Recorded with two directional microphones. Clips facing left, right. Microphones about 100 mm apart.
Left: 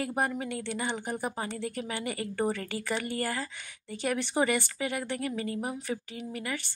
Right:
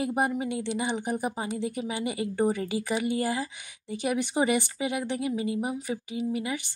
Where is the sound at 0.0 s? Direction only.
15° right (ahead or behind).